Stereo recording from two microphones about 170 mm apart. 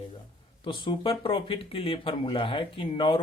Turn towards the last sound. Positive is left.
turn(degrees=30)  # may be behind; listen again after turning